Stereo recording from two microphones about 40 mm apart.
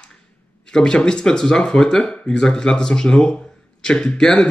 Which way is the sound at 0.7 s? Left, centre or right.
Left.